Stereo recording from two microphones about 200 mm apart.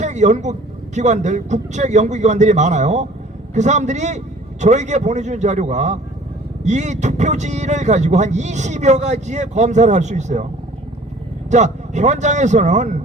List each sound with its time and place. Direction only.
0.0 s speech: 35° right (ahead or behind)
11.5 s speech: 35° right (ahead or behind)